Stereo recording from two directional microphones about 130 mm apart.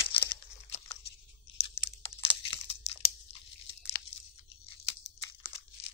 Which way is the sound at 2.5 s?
50° left (ahead or behind).